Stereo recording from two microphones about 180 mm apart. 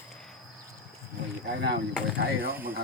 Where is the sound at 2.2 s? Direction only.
60° right (ahead or behind).